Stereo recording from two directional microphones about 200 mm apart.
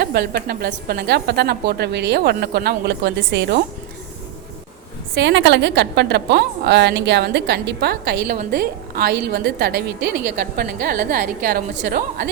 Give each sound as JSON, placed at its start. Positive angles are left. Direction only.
{"t": 0.0, "sound": "speech", "side_deg": -50}
{"t": 5.1, "sound": "a woman's voice", "side_deg": -60}